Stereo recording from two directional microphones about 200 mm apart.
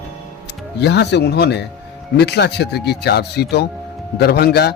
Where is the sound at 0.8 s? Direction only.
60° left (ahead or behind).